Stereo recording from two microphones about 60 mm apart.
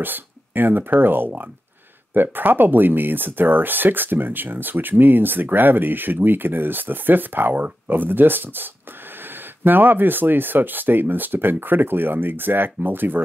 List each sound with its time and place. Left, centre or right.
0.0 s speech: right
9.7 s speech: right